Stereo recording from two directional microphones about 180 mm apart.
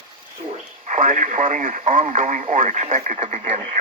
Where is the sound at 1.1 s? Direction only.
45° right (ahead or behind).